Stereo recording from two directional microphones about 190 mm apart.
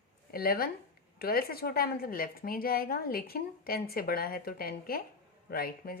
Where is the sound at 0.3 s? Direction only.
55° left (ahead or behind).